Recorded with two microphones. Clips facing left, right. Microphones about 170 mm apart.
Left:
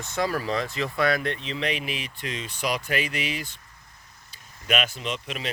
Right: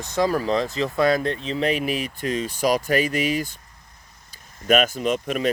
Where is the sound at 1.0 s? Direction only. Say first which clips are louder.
Right 4 dB; 25° right (ahead or behind).